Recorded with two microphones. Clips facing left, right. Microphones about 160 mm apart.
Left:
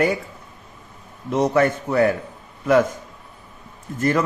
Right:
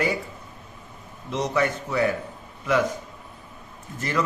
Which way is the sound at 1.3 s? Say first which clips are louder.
Left 6 dB; 55° left (ahead or behind).